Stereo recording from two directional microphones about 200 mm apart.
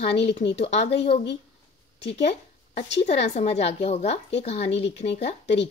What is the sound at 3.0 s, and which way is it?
A woman's voice, 35° left (ahead or behind).